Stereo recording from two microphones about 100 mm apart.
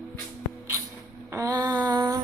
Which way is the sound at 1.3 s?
35° right (ahead or behind).